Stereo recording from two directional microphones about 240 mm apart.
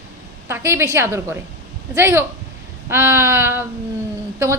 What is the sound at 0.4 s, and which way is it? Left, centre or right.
A woman's voice, centre.